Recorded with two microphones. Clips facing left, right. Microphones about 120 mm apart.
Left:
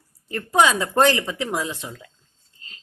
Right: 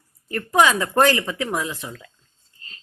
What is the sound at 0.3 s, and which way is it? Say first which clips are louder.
Speech: right 1 dB; 20° left (ahead or behind).